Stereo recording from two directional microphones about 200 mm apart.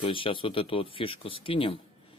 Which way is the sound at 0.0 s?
25° left (ahead or behind).